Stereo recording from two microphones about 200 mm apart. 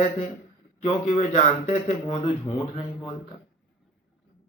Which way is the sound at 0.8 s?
35° left (ahead or behind).